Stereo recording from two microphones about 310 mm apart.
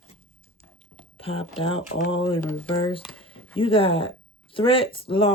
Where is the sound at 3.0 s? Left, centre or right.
Centre.